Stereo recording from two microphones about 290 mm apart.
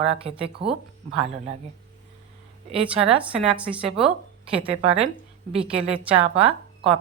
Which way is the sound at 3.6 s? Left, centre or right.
Centre.